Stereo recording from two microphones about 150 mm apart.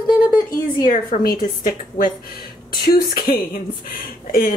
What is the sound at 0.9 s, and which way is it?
Speech, 75° left (ahead or behind).